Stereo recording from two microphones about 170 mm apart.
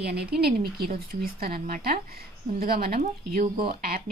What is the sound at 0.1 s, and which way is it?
Speech, 65° right (ahead or behind).